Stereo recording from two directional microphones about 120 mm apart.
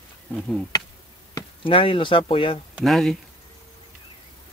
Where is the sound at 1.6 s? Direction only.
45° left (ahead or behind).